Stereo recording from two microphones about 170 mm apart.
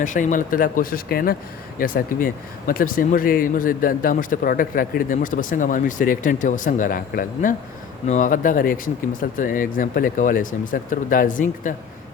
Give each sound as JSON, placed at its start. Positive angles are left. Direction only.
{"t": 0.0, "sound": "speech", "side_deg": 50}